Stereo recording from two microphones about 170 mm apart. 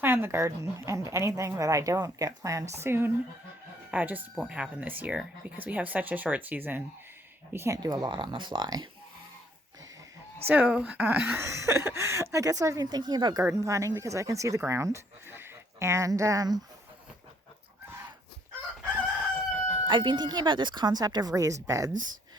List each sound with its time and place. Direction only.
0.0 s speech: 15° right (ahead or behind)
10.4 s speech: 10° right (ahead or behind)
19.9 s speech: 25° right (ahead or behind)
21.9 s speech: 50° right (ahead or behind)